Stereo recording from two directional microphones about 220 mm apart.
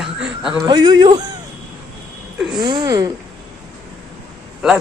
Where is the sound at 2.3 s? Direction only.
Centre (ahead or behind).